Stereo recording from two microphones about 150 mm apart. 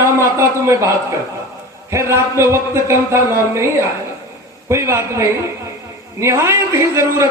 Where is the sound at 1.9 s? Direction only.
20° right (ahead or behind).